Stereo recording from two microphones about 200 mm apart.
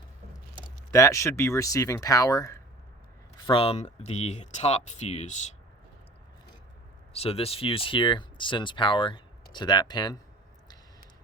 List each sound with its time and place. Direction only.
0.9 s speech: 15° left (ahead or behind)
3.4 s speech: 30° left (ahead or behind)
7.1 s speech: 30° left (ahead or behind)